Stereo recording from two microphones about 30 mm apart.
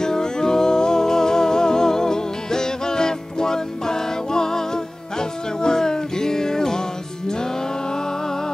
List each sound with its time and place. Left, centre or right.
0.0 s music: left